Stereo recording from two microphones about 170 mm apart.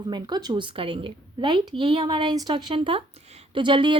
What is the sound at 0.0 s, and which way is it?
A woman's voice, 25° right (ahead or behind).